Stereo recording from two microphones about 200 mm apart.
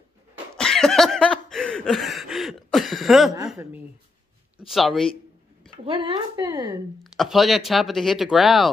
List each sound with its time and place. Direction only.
0.6 s a sound: centre (ahead or behind)
4.6 s speech: centre (ahead or behind)
5.9 s a woman's voice: 20° right (ahead or behind)
7.0 s speech: centre (ahead or behind)